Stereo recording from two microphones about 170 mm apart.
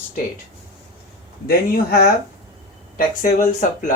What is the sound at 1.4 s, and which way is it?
Speech, 65° left (ahead or behind).